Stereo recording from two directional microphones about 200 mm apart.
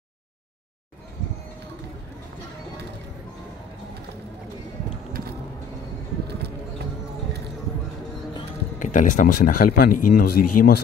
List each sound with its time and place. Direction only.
8.7 s speech: 40° left (ahead or behind)